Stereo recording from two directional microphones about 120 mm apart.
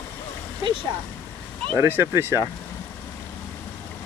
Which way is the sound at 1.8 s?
20° right (ahead or behind).